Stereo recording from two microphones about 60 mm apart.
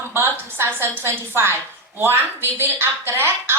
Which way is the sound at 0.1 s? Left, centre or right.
Right.